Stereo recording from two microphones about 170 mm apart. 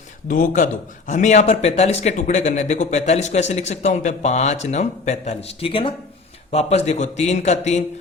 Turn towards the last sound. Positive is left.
turn(degrees=40)  # may be behind; listen again after turning